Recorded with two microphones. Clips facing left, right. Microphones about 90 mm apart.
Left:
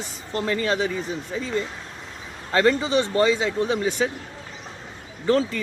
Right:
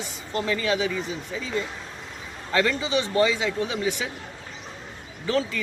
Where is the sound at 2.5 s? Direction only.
35° left (ahead or behind).